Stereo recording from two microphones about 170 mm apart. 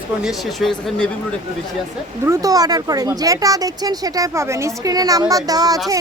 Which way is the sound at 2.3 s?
20° right (ahead or behind).